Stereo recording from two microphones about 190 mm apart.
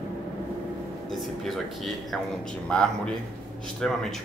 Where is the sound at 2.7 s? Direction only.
5° left (ahead or behind).